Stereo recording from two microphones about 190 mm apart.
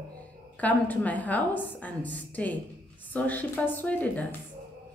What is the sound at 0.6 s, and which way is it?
A woman's voice, 10° left (ahead or behind).